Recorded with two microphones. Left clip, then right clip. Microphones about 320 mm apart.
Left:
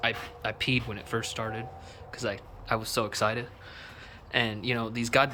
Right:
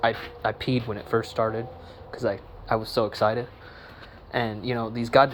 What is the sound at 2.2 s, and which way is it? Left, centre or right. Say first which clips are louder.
Speech: right 6 dB; centre.